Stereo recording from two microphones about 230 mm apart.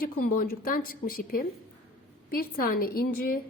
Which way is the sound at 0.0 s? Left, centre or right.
Left.